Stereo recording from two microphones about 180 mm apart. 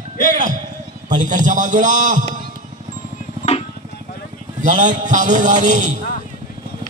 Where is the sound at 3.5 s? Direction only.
35° left (ahead or behind).